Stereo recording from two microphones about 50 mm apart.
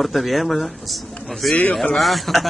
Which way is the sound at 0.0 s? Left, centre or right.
Centre.